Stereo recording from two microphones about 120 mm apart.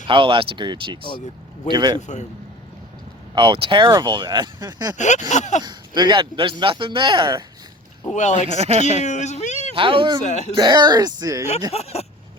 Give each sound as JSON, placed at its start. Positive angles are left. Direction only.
{"t": 0.1, "sound": "speech", "side_deg": -45}
{"t": 2.0, "sound": "speech", "side_deg": 80}
{"t": 3.3, "sound": "speech", "side_deg": -45}
{"t": 4.9, "sound": "speech", "side_deg": 80}
{"t": 5.6, "sound": "speech", "side_deg": -35}
{"t": 8.1, "sound": "speech", "side_deg": 80}
{"t": 8.4, "sound": "speech", "side_deg": -60}
{"t": 9.0, "sound": "speech", "side_deg": 75}
{"t": 9.7, "sound": "speech", "side_deg": -45}
{"t": 10.2, "sound": "speech", "side_deg": 75}
{"t": 10.6, "sound": "speech", "side_deg": -35}
{"t": 11.7, "sound": "speech", "side_deg": 60}